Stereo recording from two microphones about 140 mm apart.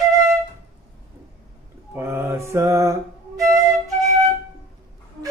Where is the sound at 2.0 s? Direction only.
15° right (ahead or behind).